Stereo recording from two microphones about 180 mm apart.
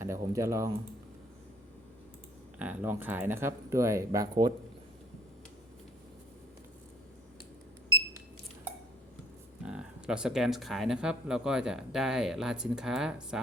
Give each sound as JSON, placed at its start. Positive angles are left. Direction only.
{"t": 0.0, "sound": "speech", "side_deg": -15}
{"t": 2.6, "sound": "speech", "side_deg": -10}
{"t": 9.6, "sound": "speech", "side_deg": -5}